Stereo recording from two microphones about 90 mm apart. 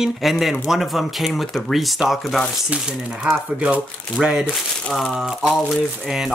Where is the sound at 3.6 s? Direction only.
10° right (ahead or behind).